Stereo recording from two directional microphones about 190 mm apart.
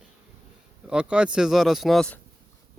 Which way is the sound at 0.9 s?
5° right (ahead or behind).